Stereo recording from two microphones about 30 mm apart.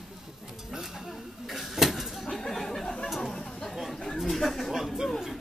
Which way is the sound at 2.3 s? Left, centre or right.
Centre.